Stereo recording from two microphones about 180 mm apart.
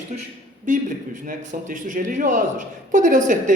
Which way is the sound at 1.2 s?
50° right (ahead or behind).